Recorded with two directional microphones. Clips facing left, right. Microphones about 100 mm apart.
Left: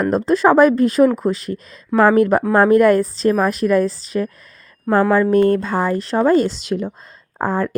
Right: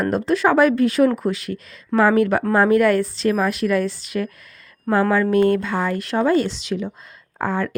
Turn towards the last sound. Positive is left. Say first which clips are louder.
# left 3 dB
turn(degrees=40)  # may be behind; listen again after turning